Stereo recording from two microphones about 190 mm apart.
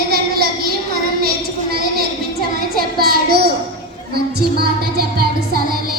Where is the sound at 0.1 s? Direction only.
55° right (ahead or behind).